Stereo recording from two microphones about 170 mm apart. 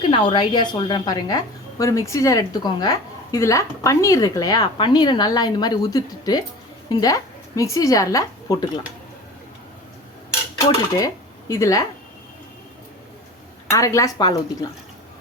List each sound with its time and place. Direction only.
0.1 s speech: 30° left (ahead or behind)
10.9 s speech: 20° left (ahead or behind)
13.7 s speech: 20° left (ahead or behind)